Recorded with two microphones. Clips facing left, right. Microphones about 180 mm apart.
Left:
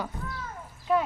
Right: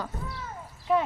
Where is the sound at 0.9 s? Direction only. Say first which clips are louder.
Even; 5° right (ahead or behind).